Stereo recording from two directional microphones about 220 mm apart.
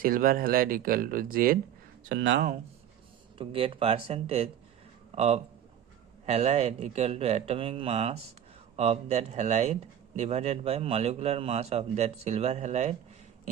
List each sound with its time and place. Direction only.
0.0 s speech: 40° right (ahead or behind)
2.0 s speech: 55° right (ahead or behind)
3.3 s a man's voice: 25° right (ahead or behind)